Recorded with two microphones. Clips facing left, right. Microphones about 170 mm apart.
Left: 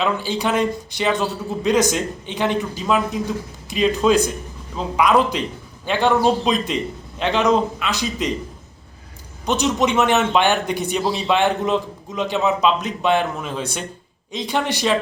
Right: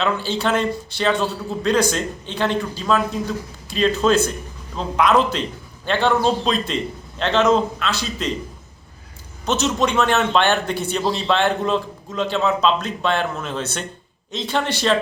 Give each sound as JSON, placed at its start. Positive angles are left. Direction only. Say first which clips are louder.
{"t": 0.0, "sound": "a man's voice", "louder": "even", "side_deg": 15}
{"t": 9.5, "sound": "a man's voice", "louder": "left 1 dB", "side_deg": 15}